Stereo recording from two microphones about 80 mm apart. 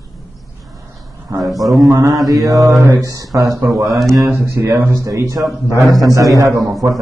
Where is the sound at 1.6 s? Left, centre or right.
Right.